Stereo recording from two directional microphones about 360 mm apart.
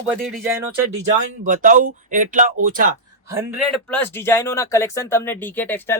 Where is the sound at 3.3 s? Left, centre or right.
Centre.